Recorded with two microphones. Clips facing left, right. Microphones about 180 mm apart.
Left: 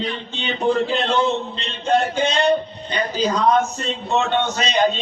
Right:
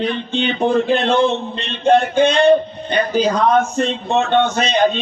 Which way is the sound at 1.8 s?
55° right (ahead or behind).